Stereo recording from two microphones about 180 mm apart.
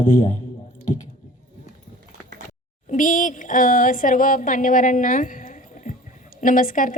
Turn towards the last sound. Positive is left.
turn(degrees=50)  # may be behind; listen again after turning